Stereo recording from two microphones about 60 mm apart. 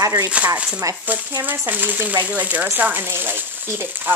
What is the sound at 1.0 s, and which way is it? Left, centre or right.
Speech, right.